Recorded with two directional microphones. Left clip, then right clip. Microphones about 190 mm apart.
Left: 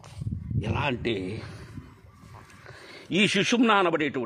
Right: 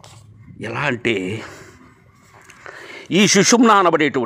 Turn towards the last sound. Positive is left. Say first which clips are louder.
# right 9 dB
turn(degrees=-30)  # may be behind; listen again after turning